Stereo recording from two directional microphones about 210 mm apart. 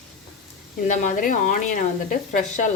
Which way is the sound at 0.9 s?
40° left (ahead or behind).